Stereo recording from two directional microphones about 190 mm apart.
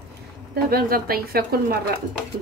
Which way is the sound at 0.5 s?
50° right (ahead or behind).